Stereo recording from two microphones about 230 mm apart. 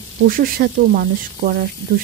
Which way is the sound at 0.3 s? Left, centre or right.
Right.